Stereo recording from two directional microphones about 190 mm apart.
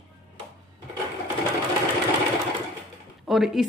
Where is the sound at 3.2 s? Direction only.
Centre (ahead or behind).